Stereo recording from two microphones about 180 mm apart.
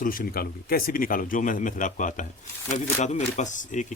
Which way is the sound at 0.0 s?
50° left (ahead or behind).